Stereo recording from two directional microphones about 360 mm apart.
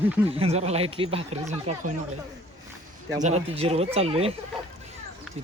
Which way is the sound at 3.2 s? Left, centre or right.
Centre.